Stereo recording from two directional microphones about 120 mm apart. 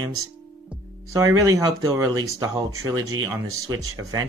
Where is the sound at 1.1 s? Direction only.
30° right (ahead or behind).